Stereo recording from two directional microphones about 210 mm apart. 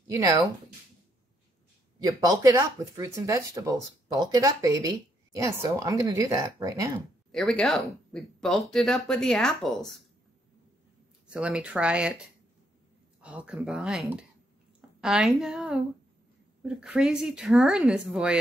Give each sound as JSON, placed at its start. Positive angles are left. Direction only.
{"t": 0.0, "sound": "speech", "side_deg": -15}
{"t": 2.0, "sound": "speech", "side_deg": -15}
{"t": 7.3, "sound": "speech", "side_deg": 0}
{"t": 11.2, "sound": "speech", "side_deg": -5}
{"t": 13.2, "sound": "speech", "side_deg": -5}